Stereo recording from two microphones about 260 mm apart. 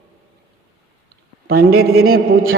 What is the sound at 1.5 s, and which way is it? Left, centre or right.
Music, right.